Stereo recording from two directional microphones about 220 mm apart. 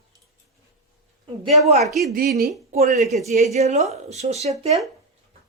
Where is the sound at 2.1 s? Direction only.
45° right (ahead or behind).